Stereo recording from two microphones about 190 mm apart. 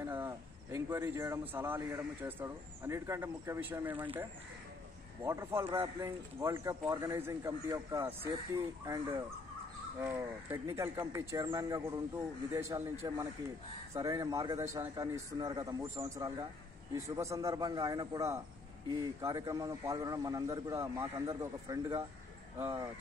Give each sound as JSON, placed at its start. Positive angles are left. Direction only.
{"t": 0.0, "sound": "speech", "side_deg": -15}
{"t": 5.2, "sound": "speech", "side_deg": -15}